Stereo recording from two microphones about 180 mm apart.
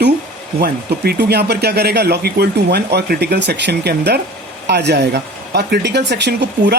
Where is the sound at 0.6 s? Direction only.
60° right (ahead or behind).